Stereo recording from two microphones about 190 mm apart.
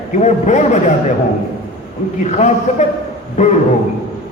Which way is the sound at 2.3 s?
40° left (ahead or behind).